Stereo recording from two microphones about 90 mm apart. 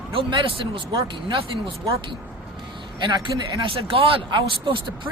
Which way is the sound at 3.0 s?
55° right (ahead or behind).